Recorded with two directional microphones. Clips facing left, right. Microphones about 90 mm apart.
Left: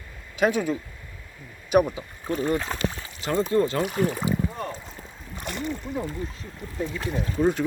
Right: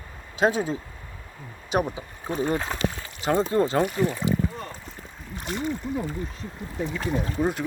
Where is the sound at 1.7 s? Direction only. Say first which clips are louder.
Left 5 dB; 25° right (ahead or behind).